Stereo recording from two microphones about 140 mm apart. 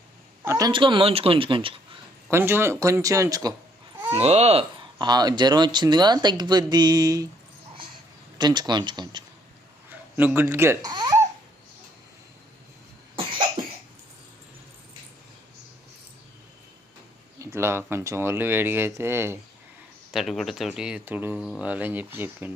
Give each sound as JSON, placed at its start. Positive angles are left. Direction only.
{"t": 0.4, "sound": "a sound", "side_deg": -25}
{"t": 0.7, "sound": "speech", "side_deg": -35}
{"t": 2.3, "sound": "speech", "side_deg": -15}
{"t": 4.1, "sound": "speech", "side_deg": -50}
{"t": 4.9, "sound": "speech", "side_deg": -30}
{"t": 8.4, "sound": "speech", "side_deg": -30}
{"t": 10.2, "sound": "speech", "side_deg": -15}
{"t": 17.4, "sound": "speech", "side_deg": -20}
{"t": 20.1, "sound": "speech", "side_deg": 0}